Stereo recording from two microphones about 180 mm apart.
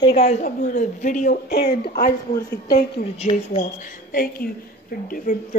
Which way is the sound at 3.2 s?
35° left (ahead or behind).